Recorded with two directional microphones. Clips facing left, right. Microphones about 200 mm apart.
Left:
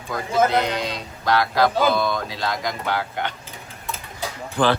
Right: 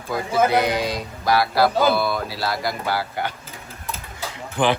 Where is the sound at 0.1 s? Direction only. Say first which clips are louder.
Right 1 dB; 10° right (ahead or behind).